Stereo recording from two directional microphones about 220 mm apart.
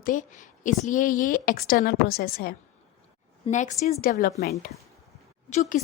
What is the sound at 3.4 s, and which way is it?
A woman's voice, 35° left (ahead or behind).